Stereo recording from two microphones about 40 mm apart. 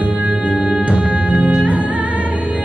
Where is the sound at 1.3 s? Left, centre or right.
Right.